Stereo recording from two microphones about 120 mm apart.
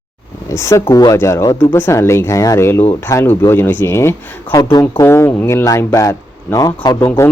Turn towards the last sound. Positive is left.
turn(degrees=30)  # may be behind; listen again after turning